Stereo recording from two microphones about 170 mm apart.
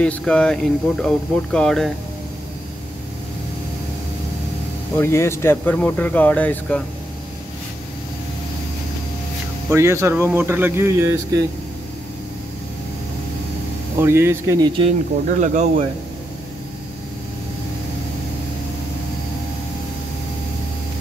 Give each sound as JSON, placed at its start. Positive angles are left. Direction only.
{"t": 0.0, "sound": "speech", "side_deg": 5}
{"t": 4.9, "sound": "speech", "side_deg": 15}
{"t": 9.7, "sound": "speech", "side_deg": -15}
{"t": 13.9, "sound": "speech", "side_deg": -15}
{"t": 14.8, "sound": "speech", "side_deg": -45}